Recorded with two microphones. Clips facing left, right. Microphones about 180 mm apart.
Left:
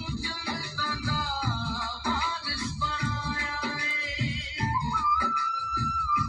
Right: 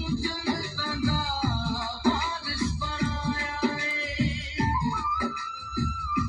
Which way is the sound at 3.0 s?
25° right (ahead or behind).